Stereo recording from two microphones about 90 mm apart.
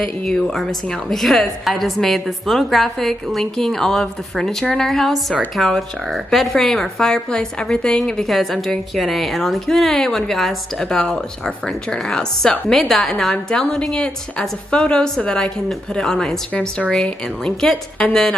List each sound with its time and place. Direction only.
0.0 s a woman's voice: 5° left (ahead or behind)